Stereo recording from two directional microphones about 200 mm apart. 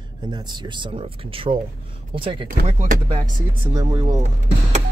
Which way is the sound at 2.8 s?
40° right (ahead or behind).